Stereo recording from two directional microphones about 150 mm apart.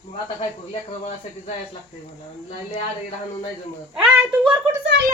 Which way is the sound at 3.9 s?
10° right (ahead or behind).